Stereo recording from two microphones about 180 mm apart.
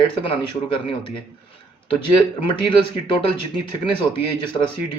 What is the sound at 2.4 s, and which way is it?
Speech, 30° left (ahead or behind).